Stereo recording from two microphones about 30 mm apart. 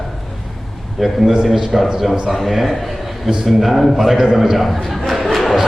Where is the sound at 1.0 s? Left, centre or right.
Centre.